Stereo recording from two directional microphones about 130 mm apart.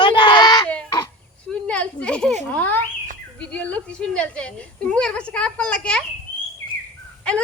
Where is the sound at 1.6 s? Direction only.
10° left (ahead or behind).